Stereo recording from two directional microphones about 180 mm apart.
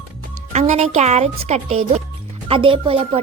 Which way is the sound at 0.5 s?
40° right (ahead or behind).